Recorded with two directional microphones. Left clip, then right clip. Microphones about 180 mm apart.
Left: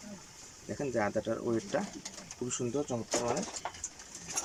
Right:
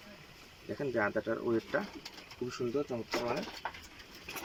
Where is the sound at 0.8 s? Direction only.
5° left (ahead or behind).